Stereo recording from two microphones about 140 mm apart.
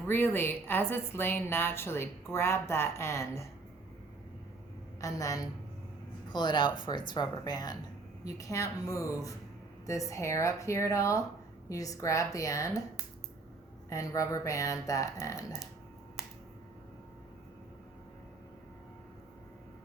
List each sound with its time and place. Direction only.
0.1 s a woman's voice: 15° left (ahead or behind)
4.9 s speech: 25° left (ahead or behind)
13.9 s speech: 25° left (ahead or behind)
16.2 s a sound: 5° right (ahead or behind)